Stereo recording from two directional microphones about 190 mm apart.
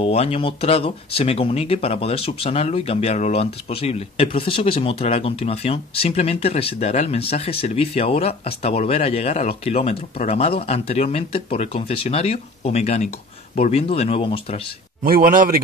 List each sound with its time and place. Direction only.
0.0 s speech: 30° left (ahead or behind)
15.0 s a man's voice: 50° right (ahead or behind)